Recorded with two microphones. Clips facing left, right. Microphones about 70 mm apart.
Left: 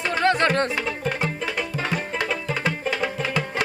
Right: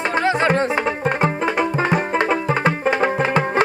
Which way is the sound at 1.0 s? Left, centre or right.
Right.